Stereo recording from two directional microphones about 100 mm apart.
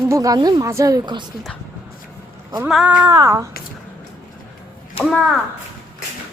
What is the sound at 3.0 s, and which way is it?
Speech, 35° right (ahead or behind).